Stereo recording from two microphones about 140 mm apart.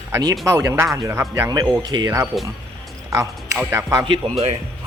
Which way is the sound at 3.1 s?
20° right (ahead or behind).